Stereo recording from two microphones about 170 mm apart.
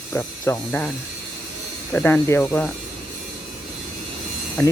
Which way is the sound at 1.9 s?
10° left (ahead or behind).